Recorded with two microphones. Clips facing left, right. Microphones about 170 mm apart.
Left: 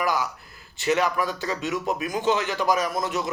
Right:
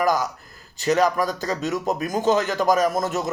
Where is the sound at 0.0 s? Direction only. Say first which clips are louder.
Right 4 dB; 45° right (ahead or behind).